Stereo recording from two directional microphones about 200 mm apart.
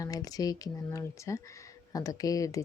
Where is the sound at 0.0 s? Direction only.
20° left (ahead or behind).